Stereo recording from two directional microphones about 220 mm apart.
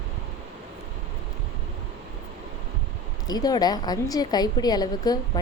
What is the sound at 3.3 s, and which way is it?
A woman's voice, 15° left (ahead or behind).